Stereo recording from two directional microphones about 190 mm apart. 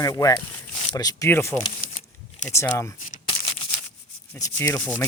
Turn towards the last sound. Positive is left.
turn(degrees=10)  # may be behind; listen again after turning